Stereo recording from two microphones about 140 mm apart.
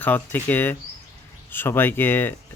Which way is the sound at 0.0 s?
15° left (ahead or behind).